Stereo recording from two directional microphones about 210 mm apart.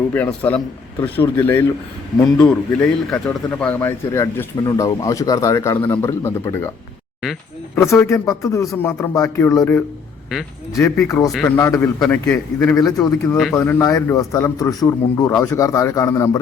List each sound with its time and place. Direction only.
0.1 s speech: 5° left (ahead or behind)
7.9 s speech: 10° left (ahead or behind)